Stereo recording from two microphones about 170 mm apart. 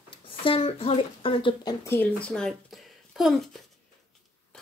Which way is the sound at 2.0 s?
10° left (ahead or behind).